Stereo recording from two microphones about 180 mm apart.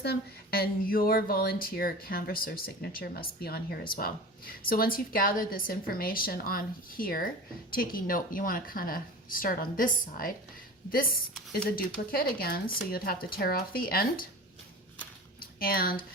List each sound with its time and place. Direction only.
0.0 s a woman's voice: 60° left (ahead or behind)
15.4 s speech: 55° left (ahead or behind)